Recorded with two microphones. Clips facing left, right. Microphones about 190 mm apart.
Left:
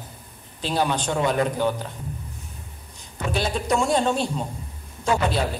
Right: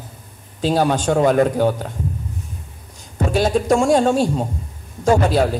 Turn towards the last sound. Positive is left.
turn(degrees=-45)  # may be behind; listen again after turning